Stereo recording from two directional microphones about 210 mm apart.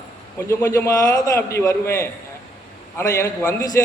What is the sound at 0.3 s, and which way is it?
A man's voice, 10° left (ahead or behind).